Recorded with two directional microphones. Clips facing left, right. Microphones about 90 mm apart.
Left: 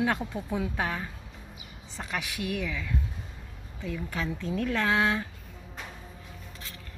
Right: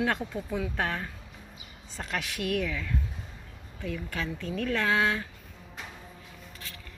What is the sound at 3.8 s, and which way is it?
Speech, 20° left (ahead or behind).